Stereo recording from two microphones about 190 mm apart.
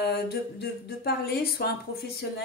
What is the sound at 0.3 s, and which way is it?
A woman's voice, 55° left (ahead or behind).